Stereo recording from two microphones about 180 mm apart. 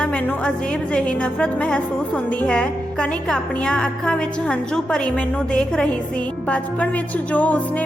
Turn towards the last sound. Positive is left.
turn(degrees=10)  # may be behind; listen again after turning